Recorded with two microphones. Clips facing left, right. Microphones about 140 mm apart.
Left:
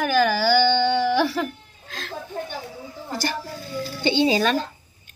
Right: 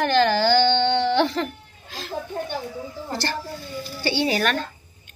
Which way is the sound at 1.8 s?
5° right (ahead or behind).